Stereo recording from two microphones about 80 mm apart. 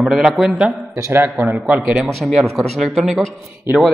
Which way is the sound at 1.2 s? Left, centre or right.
Centre.